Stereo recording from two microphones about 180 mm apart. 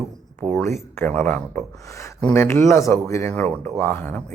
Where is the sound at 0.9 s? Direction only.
10° left (ahead or behind).